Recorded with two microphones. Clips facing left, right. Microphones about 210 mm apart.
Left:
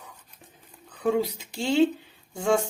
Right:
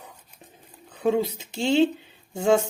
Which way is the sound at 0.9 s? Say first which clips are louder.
Right 2 dB; 25° right (ahead or behind).